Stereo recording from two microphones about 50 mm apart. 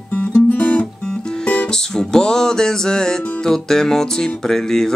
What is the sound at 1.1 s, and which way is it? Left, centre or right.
Music, centre.